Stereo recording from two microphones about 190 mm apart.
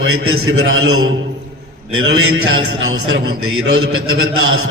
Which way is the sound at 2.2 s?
85° right.